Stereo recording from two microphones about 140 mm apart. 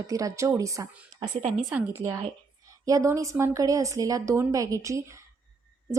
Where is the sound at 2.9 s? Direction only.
25° right (ahead or behind).